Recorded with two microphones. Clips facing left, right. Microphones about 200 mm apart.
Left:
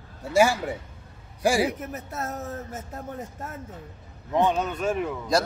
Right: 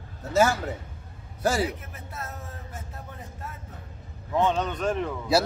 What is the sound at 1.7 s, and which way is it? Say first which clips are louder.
A man's voice: left 6 dB; 45° left (ahead or behind).